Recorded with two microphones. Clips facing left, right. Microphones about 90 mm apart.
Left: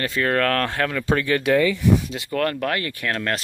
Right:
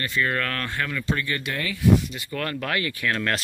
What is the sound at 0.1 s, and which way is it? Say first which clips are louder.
Speech: left 5 dB; 70° left (ahead or behind).